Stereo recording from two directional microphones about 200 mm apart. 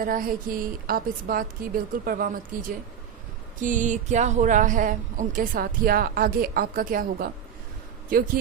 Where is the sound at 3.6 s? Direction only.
40° right (ahead or behind).